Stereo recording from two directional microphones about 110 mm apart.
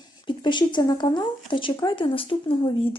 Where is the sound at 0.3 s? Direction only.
45° left (ahead or behind).